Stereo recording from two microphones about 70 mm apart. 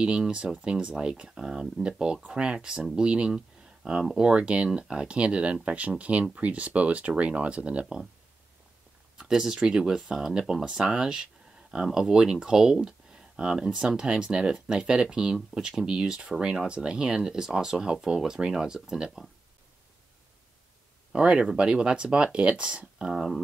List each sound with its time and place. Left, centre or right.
0.0 s speech: centre
9.2 s speech: centre
21.1 s speech: centre